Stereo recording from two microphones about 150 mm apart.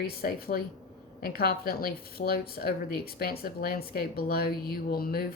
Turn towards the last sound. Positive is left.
turn(degrees=85)